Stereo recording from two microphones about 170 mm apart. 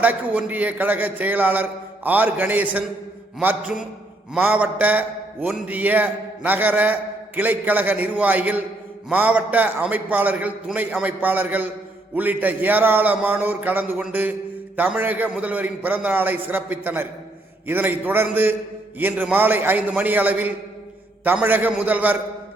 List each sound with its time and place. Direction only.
0.0 s a man's voice: 10° right (ahead or behind)